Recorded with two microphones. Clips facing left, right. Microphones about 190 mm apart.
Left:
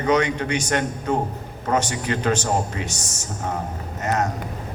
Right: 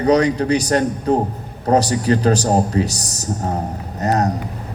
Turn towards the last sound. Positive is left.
turn(degrees=-35)  # may be behind; listen again after turning